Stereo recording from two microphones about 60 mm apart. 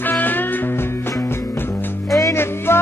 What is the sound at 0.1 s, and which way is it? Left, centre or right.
Music, left.